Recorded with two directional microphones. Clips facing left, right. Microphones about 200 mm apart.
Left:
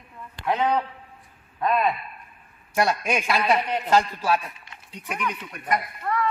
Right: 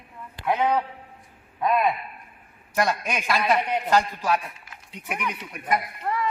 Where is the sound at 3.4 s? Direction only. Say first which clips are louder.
Even; 10° right (ahead or behind).